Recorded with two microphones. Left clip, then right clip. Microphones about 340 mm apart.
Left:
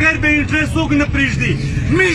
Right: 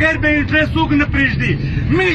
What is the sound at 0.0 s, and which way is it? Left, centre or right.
A man's voice, centre.